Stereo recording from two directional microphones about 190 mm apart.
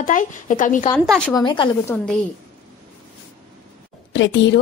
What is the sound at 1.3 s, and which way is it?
Speech, 25° left (ahead or behind).